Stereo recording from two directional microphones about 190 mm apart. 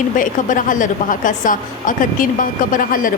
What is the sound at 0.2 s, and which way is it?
A woman's voice, 45° left (ahead or behind).